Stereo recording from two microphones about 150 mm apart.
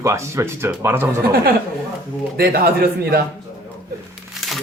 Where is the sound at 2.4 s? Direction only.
90° right.